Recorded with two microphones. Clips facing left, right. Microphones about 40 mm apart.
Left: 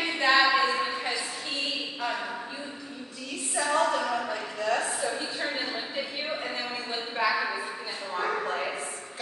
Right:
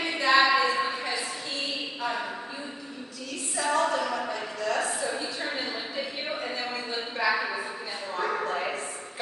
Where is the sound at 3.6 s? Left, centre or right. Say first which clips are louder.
Even; centre.